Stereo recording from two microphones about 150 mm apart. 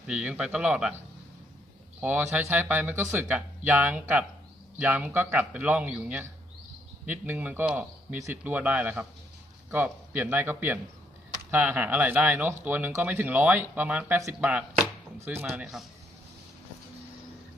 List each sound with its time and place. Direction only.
0.1 s speech: 5° right (ahead or behind)
2.0 s speech: 10° right (ahead or behind)
15.4 s a man's voice: centre (ahead or behind)